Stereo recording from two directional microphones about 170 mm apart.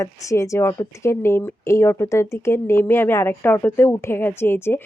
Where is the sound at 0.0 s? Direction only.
20° left (ahead or behind).